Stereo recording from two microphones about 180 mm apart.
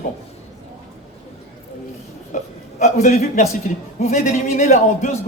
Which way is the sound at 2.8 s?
40° left (ahead or behind).